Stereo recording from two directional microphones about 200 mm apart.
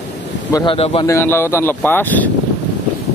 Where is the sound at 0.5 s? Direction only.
25° left (ahead or behind).